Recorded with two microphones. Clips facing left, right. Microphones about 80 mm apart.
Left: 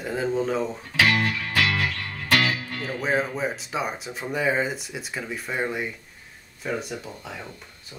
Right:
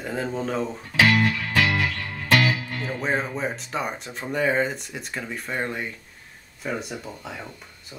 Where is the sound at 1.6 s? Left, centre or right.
Right.